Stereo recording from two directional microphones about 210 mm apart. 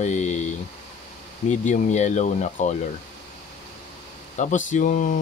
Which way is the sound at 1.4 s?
35° left (ahead or behind).